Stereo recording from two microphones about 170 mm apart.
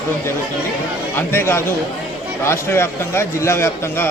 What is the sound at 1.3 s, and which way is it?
A man's voice, 15° left (ahead or behind).